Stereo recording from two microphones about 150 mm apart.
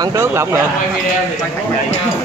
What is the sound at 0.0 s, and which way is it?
Speech, 20° right (ahead or behind).